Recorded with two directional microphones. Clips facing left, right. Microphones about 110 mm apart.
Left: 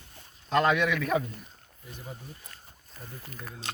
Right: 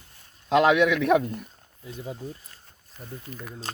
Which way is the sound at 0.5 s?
80° right.